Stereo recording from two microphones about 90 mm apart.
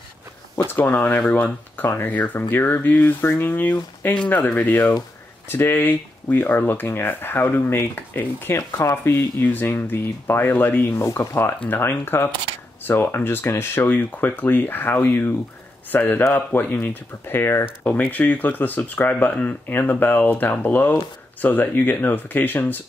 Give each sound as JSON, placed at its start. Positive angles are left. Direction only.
{"t": 0.7, "sound": "speech", "side_deg": 20}